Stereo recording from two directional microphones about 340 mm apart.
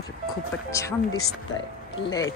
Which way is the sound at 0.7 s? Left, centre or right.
Centre.